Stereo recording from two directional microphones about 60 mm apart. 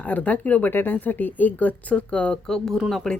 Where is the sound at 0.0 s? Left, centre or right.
Left.